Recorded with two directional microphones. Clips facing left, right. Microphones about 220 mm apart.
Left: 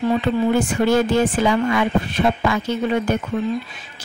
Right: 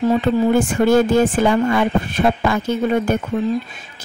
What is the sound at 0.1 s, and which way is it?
Speech, 45° right (ahead or behind).